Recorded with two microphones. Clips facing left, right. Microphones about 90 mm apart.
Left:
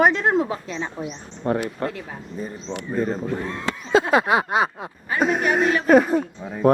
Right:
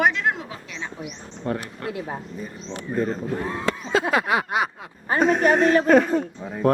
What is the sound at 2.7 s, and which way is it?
Speech, 35° left (ahead or behind).